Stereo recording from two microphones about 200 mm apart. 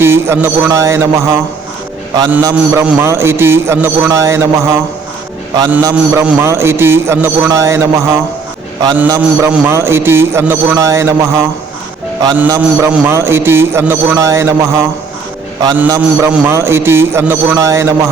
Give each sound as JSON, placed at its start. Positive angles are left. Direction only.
{"t": 0.0, "sound": "a man's voice", "side_deg": -10}